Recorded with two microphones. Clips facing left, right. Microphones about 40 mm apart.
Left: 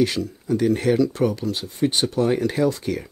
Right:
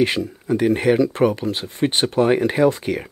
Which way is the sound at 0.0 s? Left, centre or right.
Right.